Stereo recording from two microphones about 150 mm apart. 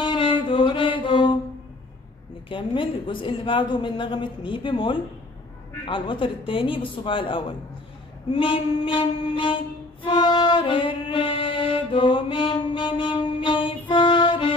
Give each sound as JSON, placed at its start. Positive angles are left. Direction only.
{"t": 0.0, "sound": "mantra", "side_deg": 35}
{"t": 2.5, "sound": "a woman's voice", "side_deg": 35}
{"t": 8.3, "sound": "music", "side_deg": 35}